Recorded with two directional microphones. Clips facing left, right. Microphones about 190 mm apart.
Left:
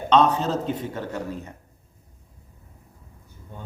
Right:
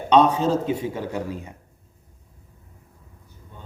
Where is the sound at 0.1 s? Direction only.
10° right (ahead or behind).